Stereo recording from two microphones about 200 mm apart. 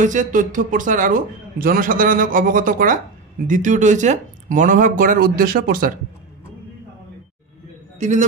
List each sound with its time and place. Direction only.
0.0 s a man's voice: 40° right (ahead or behind)
8.0 s speech: 35° right (ahead or behind)